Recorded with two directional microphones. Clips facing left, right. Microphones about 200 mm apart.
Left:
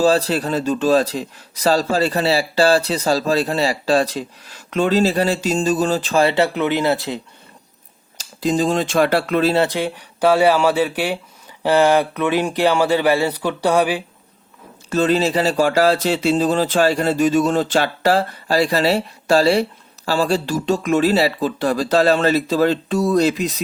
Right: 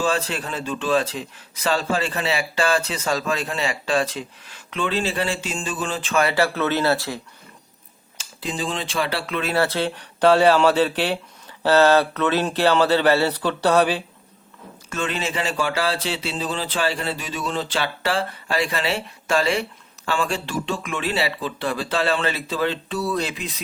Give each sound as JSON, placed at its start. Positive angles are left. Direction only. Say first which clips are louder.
{"t": 0.0, "sound": "speech", "louder": "left 7 dB", "side_deg": 35}
{"t": 8.2, "sound": "speech", "louder": "left 10 dB", "side_deg": 40}
{"t": 9.4, "sound": "speech", "louder": "left 4 dB", "side_deg": 30}
{"t": 9.6, "sound": "speech", "louder": "left 2 dB", "side_deg": 15}
{"t": 14.8, "sound": "speech", "louder": "left 10 dB", "side_deg": 35}